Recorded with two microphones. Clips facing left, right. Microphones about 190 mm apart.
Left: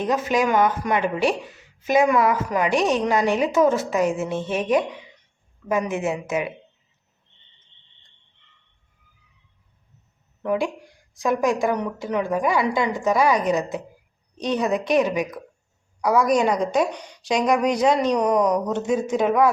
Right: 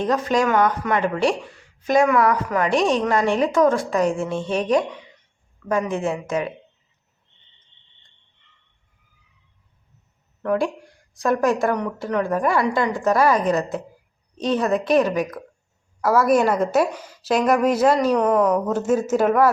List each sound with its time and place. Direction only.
0.0 s a woman's voice: 5° left (ahead or behind)
0.4 s speech: 20° left (ahead or behind)
2.0 s speech: 20° left (ahead or behind)
2.6 s a woman's voice: centre (ahead or behind)
5.6 s speech: 15° left (ahead or behind)
10.4 s a woman's voice: centre (ahead or behind)
18.2 s speech: 15° left (ahead or behind)
18.6 s a woman's voice: 5° right (ahead or behind)